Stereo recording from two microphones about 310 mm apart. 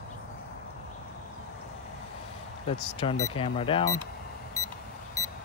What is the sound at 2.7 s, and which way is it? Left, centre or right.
Speech, centre.